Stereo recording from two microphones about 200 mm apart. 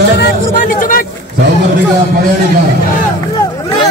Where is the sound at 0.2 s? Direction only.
40° left (ahead or behind).